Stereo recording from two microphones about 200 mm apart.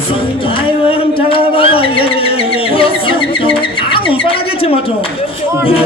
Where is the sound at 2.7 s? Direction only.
25° left (ahead or behind).